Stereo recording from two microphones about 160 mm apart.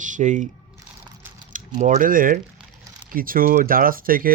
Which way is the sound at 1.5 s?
50° right (ahead or behind).